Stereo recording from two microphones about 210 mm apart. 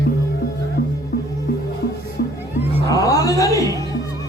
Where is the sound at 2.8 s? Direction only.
15° left (ahead or behind).